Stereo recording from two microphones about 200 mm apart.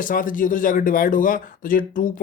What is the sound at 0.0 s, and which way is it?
Speech, 45° left (ahead or behind).